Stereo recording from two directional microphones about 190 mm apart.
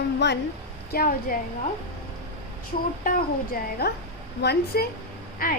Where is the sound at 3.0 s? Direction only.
50° left (ahead or behind).